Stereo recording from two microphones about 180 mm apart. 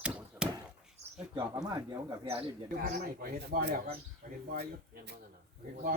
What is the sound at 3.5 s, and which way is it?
Speech, 60° right (ahead or behind).